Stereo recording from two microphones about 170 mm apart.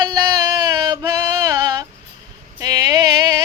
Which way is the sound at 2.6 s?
20° right (ahead or behind).